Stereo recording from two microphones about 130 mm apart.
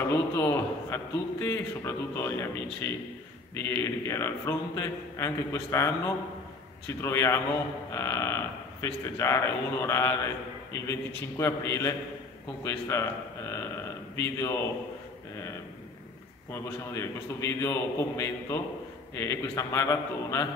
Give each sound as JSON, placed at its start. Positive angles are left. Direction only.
{"t": 0.1, "sound": "a man's voice", "side_deg": 20}
{"t": 7.0, "sound": "a man's voice", "side_deg": 20}
{"t": 14.1, "sound": "a man's voice", "side_deg": 20}
{"t": 16.5, "sound": "a man's voice", "side_deg": 20}